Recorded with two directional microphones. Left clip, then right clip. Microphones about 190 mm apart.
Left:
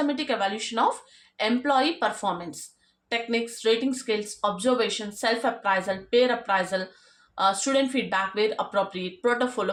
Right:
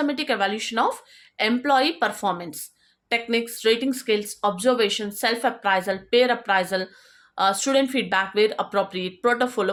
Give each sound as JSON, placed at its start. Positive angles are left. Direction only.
{"t": 0.0, "sound": "speech", "side_deg": -50}